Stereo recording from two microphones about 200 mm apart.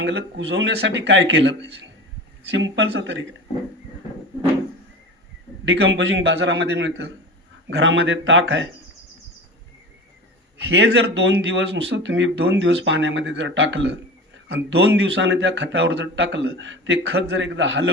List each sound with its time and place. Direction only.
0.0 s speech: 60° right (ahead or behind)
5.6 s speech: 65° right (ahead or behind)
7.7 s speech: 75° right (ahead or behind)
10.7 s speech: 60° right (ahead or behind)
15.0 s speech: 65° right (ahead or behind)